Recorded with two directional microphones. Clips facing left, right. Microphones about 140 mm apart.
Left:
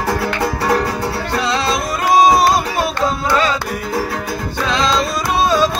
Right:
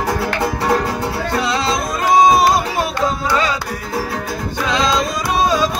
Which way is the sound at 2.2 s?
20° right (ahead or behind).